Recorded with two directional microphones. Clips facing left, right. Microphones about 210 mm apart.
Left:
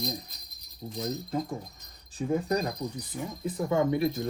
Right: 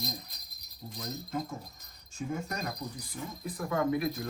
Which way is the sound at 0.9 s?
30° left (ahead or behind).